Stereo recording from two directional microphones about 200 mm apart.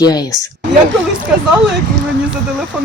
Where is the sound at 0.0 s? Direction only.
20° left (ahead or behind).